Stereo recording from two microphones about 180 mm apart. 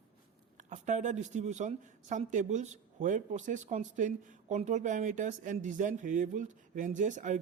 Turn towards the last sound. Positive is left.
turn(degrees=-45)  # may be behind; listen again after turning